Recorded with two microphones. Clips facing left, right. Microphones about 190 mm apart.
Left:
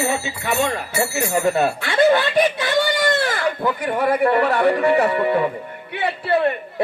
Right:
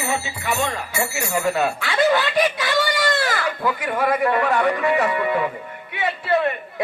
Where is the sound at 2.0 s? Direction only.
30° left (ahead or behind).